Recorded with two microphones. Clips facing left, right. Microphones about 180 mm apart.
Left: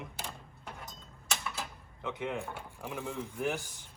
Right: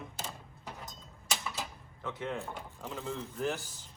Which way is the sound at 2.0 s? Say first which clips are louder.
Left 1 dB; 15° left (ahead or behind).